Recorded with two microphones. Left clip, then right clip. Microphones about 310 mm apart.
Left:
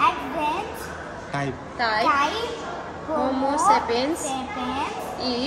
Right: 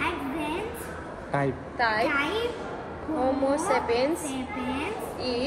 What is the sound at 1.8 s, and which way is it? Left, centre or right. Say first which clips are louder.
Speech: left 2 dB; left.